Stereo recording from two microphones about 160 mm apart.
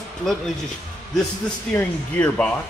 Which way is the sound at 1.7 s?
10° left (ahead or behind).